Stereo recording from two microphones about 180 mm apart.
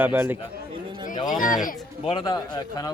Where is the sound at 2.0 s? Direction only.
25° left (ahead or behind).